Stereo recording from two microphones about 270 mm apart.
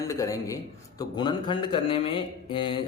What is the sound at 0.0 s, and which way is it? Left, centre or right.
A man's voice, centre.